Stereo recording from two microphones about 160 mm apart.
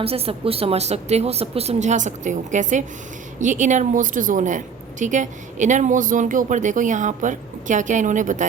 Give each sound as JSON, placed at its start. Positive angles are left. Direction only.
{"t": 0.0, "sound": "a woman's voice", "side_deg": -35}